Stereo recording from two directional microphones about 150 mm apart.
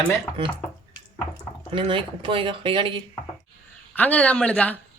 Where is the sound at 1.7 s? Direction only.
35° right (ahead or behind).